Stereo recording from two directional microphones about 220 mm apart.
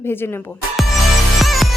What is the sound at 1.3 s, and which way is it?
Music, centre (ahead or behind).